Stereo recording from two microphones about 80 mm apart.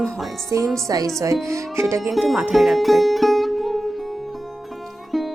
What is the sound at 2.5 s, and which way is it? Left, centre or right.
Music, centre.